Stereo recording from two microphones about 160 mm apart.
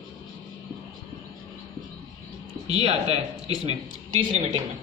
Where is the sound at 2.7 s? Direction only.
40° right (ahead or behind).